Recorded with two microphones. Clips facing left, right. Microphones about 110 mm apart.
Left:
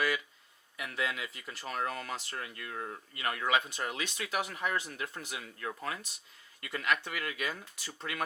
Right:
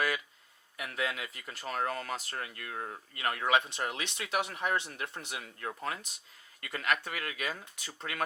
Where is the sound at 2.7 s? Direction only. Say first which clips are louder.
Even; 15° right (ahead or behind).